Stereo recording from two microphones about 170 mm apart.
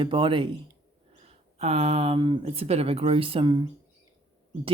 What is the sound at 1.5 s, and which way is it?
Speech, 40° right (ahead or behind).